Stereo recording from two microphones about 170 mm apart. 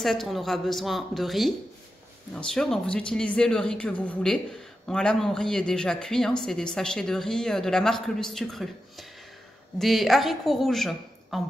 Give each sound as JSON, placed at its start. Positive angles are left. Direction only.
{"t": 0.0, "sound": "a woman's voice", "side_deg": 0}